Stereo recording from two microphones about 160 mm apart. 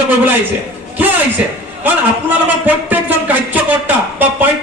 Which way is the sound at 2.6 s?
10° right (ahead or behind).